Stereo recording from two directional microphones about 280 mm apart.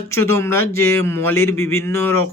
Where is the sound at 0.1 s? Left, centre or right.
Centre.